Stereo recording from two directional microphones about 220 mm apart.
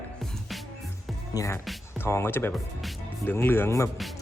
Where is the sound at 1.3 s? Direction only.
15° left (ahead or behind).